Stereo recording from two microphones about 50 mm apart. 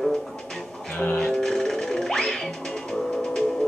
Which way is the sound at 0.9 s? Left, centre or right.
Left.